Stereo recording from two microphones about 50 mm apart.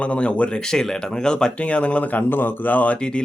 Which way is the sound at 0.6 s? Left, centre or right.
Centre.